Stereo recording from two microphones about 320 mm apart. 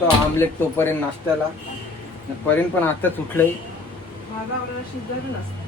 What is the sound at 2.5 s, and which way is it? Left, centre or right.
Speech, centre.